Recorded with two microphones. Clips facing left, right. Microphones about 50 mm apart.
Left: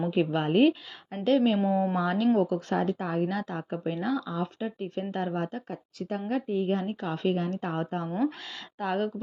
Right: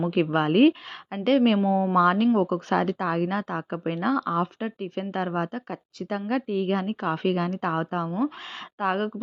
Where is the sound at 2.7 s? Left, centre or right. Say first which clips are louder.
Right 4 dB; right.